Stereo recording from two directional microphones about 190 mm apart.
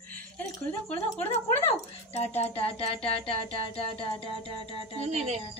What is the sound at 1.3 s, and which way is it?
Speech, 35° left (ahead or behind).